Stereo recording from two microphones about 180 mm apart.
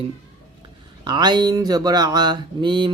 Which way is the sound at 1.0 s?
25° right (ahead or behind).